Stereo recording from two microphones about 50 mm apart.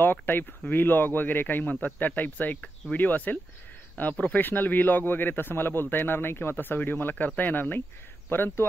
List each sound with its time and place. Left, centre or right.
0.0 s a man's voice: left
6.5 s a man's voice: left